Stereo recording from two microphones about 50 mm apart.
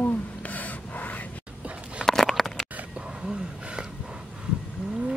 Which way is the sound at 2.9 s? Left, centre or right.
Centre.